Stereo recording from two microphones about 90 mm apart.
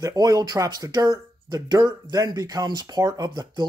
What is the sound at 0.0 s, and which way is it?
Speech, 40° right (ahead or behind).